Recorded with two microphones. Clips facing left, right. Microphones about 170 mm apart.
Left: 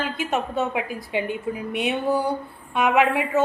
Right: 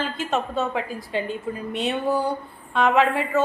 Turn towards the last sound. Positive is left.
turn(degrees=15)  # may be behind; listen again after turning